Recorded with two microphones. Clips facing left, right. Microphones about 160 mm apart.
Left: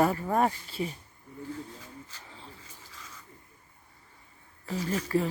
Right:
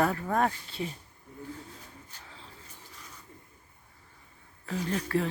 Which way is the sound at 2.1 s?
90° left.